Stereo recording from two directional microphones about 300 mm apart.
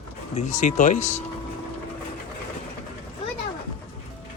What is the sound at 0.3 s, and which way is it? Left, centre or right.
Speech, left.